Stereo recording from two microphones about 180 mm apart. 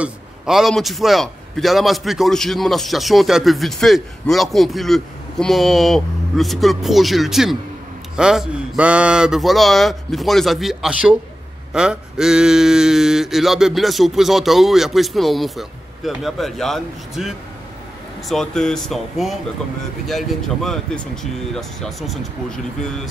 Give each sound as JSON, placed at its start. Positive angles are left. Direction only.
{"t": 0.0, "sound": "a man's voice", "side_deg": 0}